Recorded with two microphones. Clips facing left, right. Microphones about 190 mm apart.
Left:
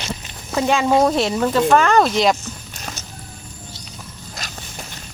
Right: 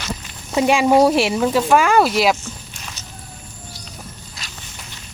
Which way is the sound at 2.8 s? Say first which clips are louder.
Left 4 dB; 45° left (ahead or behind).